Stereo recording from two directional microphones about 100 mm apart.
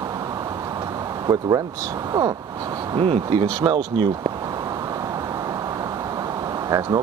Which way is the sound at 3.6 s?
45° right (ahead or behind).